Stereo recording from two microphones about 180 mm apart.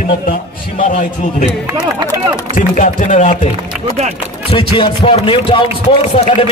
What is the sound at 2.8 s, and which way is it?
Chopping, 45° left (ahead or behind).